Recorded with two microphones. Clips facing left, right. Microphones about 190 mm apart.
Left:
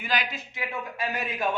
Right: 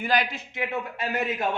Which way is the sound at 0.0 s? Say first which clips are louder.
Right 5 dB; 50° right (ahead or behind).